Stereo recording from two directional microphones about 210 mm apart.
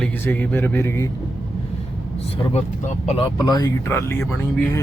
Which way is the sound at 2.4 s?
30° left (ahead or behind).